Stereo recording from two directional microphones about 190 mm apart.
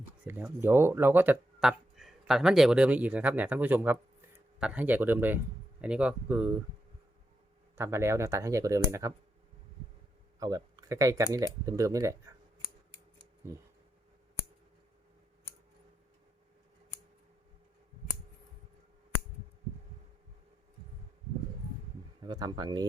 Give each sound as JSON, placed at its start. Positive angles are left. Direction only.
{"t": 0.3, "sound": "speech", "side_deg": -10}
{"t": 7.8, "sound": "speech", "side_deg": -15}
{"t": 10.4, "sound": "speech", "side_deg": -20}
{"t": 13.5, "sound": "speech", "side_deg": -15}
{"t": 22.2, "sound": "speech", "side_deg": -20}